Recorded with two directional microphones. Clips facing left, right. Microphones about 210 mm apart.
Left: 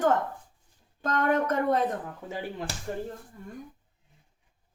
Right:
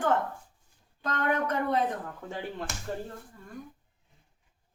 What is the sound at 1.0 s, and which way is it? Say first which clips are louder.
Speech: left 4 dB; 45° left (ahead or behind).